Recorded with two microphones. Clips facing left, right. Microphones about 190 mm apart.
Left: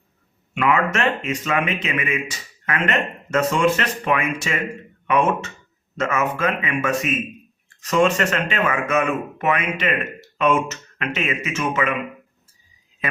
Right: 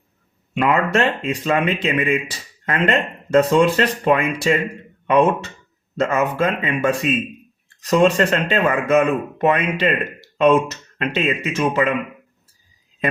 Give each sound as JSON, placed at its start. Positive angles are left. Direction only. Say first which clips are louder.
{"t": 0.5, "sound": "speech", "louder": "right 2 dB", "side_deg": -35}